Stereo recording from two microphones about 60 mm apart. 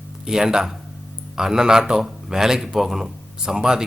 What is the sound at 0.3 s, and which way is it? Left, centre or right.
Speech, centre.